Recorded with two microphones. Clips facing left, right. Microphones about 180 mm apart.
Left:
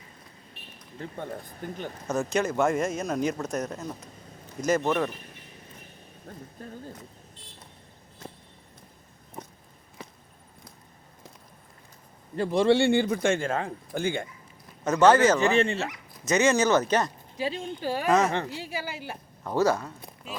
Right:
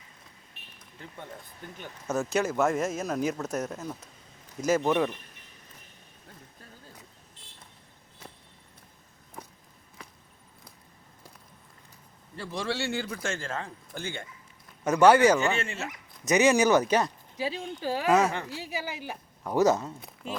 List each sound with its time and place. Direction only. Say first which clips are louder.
0.9 s speech: left 8 dB; 45° left (ahead or behind)
2.0 s a woman's voice: left 1 dB; 5° right (ahead or behind)
12.5 s speech: left 11 dB; 55° left (ahead or behind)
14.8 s a woman's voice: even; 10° right (ahead or behind)
15.5 s speech: left 9 dB; 35° left (ahead or behind)
16.2 s a woman's voice: right 1 dB; 15° right (ahead or behind)